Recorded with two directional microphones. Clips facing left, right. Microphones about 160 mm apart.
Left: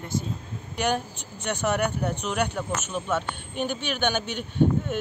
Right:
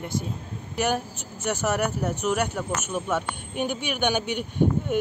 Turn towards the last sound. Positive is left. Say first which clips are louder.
# even
turn(degrees=-10)  # may be behind; listen again after turning